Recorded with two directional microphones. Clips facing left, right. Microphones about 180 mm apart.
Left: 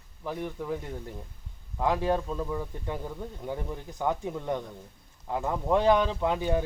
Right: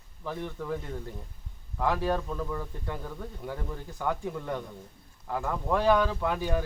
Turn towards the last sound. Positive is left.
turn(degrees=20)  # may be behind; listen again after turning